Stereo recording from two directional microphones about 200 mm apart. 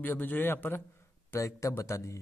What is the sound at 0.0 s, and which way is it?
Speech, 10° left (ahead or behind).